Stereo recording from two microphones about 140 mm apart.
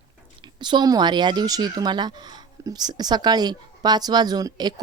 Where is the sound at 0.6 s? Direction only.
30° right (ahead or behind).